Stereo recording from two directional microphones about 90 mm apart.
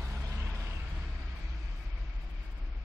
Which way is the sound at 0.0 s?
30° right (ahead or behind).